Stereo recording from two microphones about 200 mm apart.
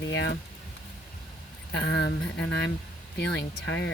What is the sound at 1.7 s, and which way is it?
Speech, 60° left (ahead or behind).